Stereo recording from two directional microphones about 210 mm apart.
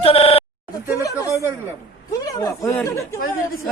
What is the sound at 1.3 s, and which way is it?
Speech, 15° right (ahead or behind).